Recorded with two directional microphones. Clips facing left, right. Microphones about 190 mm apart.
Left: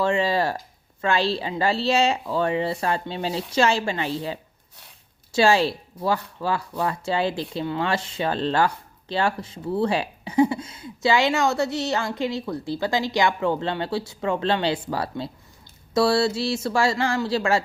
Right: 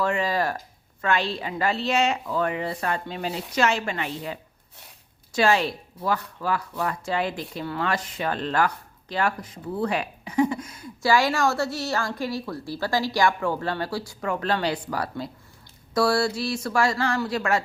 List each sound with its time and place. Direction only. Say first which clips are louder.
0.0 s speech: left 3 dB; 30° left (ahead or behind)